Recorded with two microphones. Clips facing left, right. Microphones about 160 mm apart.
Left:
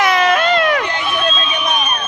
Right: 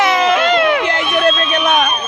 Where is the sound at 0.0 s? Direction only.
20° right (ahead or behind).